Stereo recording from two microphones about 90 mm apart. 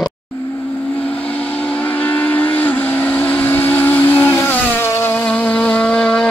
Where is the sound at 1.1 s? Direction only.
15° left (ahead or behind).